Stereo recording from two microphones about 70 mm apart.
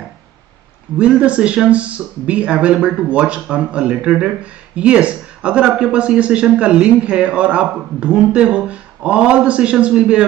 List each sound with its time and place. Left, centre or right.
0.9 s a man's voice: centre